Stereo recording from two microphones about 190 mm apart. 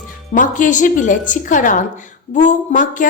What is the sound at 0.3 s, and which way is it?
A woman's voice, 40° left (ahead or behind).